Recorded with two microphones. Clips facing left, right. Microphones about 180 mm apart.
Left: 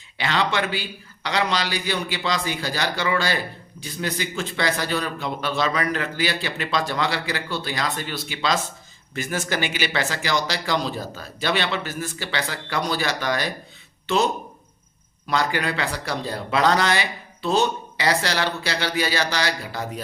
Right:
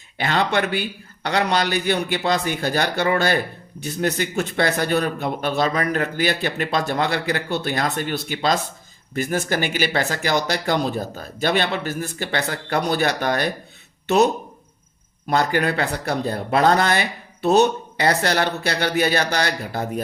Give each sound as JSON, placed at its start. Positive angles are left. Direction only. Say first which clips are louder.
{"t": 0.2, "sound": "speech", "louder": "right 3 dB", "side_deg": -50}
{"t": 15.3, "sound": "speech", "louder": "right 4 dB", "side_deg": -50}